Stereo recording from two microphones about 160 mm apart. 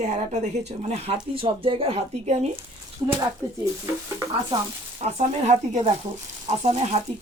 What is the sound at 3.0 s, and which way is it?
Speech, 15° right (ahead or behind).